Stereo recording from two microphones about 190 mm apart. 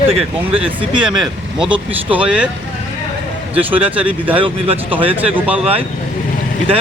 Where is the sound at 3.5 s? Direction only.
10° right (ahead or behind).